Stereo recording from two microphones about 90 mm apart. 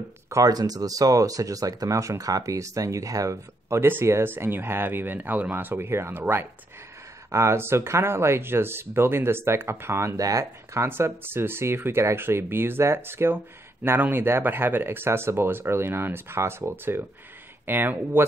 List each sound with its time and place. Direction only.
0.3 s speech: 45° right (ahead or behind); by 18.2 s 25° right (ahead or behind)